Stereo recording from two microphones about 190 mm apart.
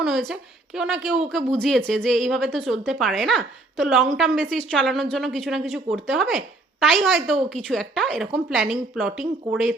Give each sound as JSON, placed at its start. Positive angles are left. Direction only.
{"t": 0.0, "sound": "a woman's voice", "side_deg": 0}